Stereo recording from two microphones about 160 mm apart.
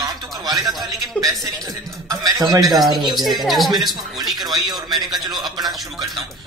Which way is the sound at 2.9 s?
25° right (ahead or behind).